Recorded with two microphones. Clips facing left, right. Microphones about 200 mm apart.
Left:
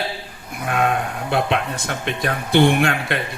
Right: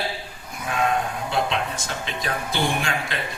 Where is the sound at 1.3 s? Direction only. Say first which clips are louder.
Left 5 dB; 60° left (ahead or behind).